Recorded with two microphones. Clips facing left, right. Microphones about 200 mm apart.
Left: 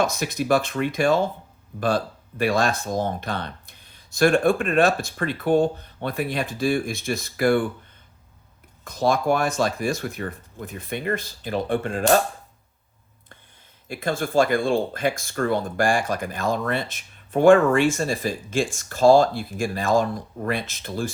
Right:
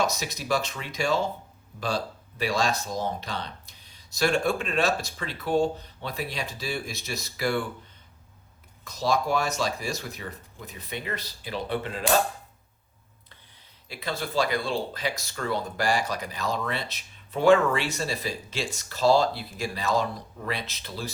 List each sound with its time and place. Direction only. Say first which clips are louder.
0.0 s speech: left 5 dB; 55° left (ahead or behind)
2.4 s speech: left 5 dB; 55° left (ahead or behind)
8.8 s speech: left 4 dB; 55° left (ahead or behind)
13.8 s speech: left 7 dB; 50° left (ahead or behind)